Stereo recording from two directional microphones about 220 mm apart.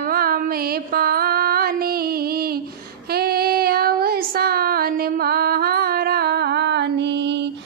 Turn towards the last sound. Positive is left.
turn(degrees=-50)  # may be behind; listen again after turning